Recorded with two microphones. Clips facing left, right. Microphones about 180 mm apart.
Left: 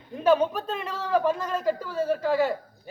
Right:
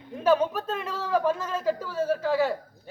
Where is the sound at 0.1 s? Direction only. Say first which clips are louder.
Left 1 dB; centre (ahead or behind).